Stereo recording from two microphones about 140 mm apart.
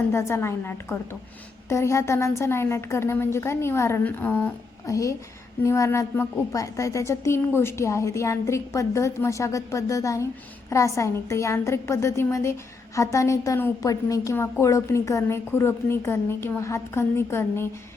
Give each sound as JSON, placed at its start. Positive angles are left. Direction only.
{"t": 0.1, "sound": "a woman's voice", "side_deg": 20}
{"t": 4.9, "sound": "a woman's voice", "side_deg": 25}